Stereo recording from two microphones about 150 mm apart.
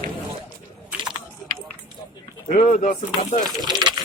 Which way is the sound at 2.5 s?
45° left (ahead or behind).